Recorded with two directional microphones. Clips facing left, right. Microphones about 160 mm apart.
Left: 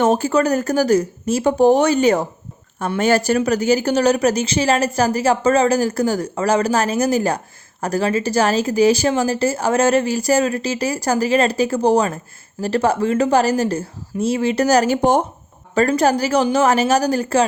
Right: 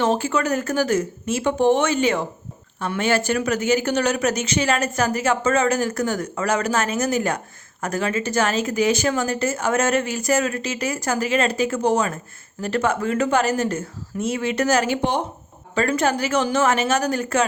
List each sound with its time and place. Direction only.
0.0 s a woman's voice: 40° left (ahead or behind)